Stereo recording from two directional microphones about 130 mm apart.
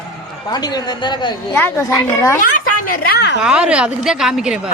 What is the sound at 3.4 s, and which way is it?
Speech, 10° right (ahead or behind).